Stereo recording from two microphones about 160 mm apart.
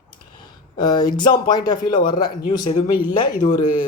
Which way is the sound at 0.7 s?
25° left (ahead or behind).